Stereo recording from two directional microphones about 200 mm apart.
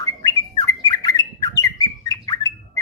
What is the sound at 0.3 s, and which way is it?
Bird, 15° left (ahead or behind).